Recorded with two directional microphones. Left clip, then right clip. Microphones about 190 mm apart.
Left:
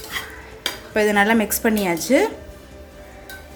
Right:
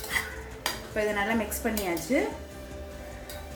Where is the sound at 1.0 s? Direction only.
50° left (ahead or behind).